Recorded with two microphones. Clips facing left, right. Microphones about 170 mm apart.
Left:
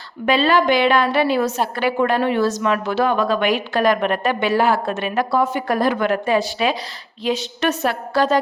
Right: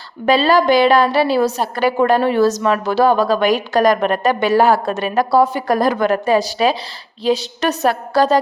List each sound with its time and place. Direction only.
0.3 s a woman's voice: 35° right (ahead or behind)